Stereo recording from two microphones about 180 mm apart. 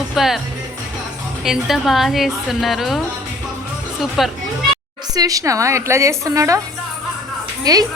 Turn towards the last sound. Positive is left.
turn(degrees=-20)  # may be behind; listen again after turning